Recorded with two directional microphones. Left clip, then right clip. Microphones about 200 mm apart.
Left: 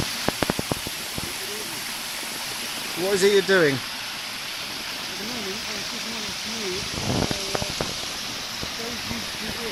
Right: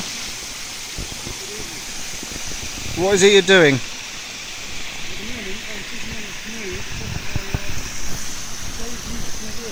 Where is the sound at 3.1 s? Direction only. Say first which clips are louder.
Right 7 dB; 40° right (ahead or behind).